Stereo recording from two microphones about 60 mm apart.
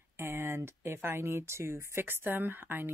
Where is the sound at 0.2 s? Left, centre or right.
Right.